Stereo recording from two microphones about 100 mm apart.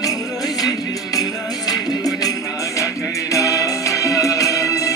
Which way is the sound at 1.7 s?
35° left (ahead or behind).